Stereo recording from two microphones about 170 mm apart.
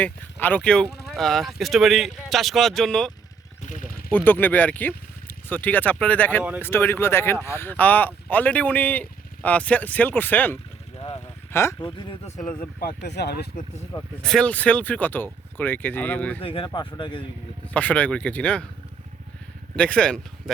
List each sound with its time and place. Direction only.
0.0 s speech: 10° left (ahead or behind)
3.7 s a sound: 55° left (ahead or behind)
4.1 s speech: 10° left (ahead or behind)
10.9 s vehicle: 30° left (ahead or behind)
11.5 s speech: 15° left (ahead or behind)
12.8 s speech: 70° left (ahead or behind)
14.2 s speech: 5° left (ahead or behind)
16.4 s speech: 30° left (ahead or behind)
17.7 s speech: 10° left (ahead or behind)
19.7 s speech: 5° left (ahead or behind)